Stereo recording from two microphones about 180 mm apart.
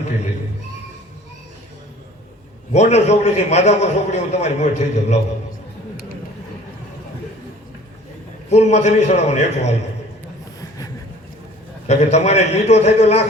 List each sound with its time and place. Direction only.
2.7 s a man's voice: 40° left (ahead or behind)
8.4 s a man's voice: 40° left (ahead or behind)
11.9 s a man's voice: 40° left (ahead or behind)